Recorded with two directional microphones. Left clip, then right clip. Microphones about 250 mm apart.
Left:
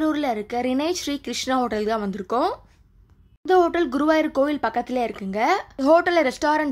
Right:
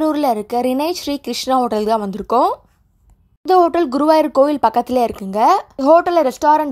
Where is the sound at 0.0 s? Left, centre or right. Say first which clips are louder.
Right 7 dB; right.